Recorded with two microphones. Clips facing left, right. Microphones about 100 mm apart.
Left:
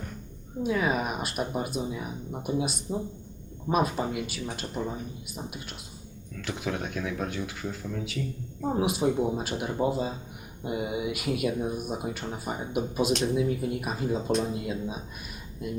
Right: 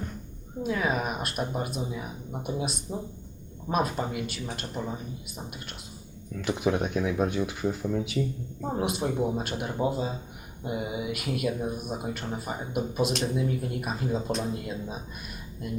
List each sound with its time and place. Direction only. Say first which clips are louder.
0.6 s speech: left 1 dB; centre (ahead or behind)
6.4 s speech: right 6 dB; 20° right (ahead or behind)
8.6 s speech: left 3 dB; centre (ahead or behind)